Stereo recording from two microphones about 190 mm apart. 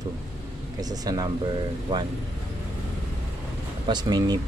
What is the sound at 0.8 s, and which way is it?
Speech, 20° right (ahead or behind).